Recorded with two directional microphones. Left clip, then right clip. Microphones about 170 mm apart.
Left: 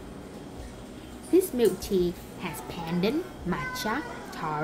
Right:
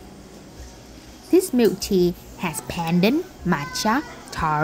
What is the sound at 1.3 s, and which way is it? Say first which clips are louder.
A woman's voice: right 5 dB; 45° right (ahead or behind).